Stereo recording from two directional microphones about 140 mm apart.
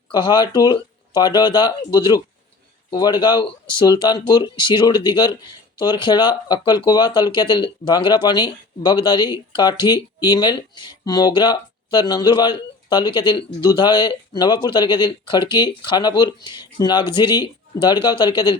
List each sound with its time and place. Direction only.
0.1 s speech: 30° left (ahead or behind)